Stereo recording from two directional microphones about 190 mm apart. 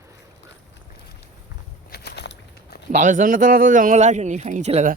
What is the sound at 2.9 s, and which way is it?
Speech, 45° right (ahead or behind).